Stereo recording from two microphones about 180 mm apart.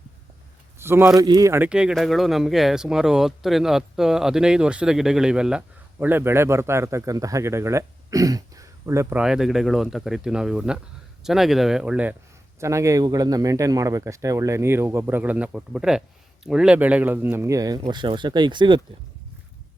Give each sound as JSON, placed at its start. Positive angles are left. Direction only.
{"t": 0.8, "sound": "a man's voice", "side_deg": -15}